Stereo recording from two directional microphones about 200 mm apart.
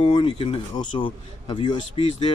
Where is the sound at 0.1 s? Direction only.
25° left (ahead or behind).